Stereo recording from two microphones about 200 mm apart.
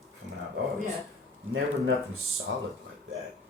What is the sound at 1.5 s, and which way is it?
Speech, 80° right.